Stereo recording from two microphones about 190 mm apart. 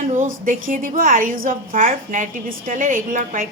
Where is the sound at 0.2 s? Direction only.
40° right (ahead or behind).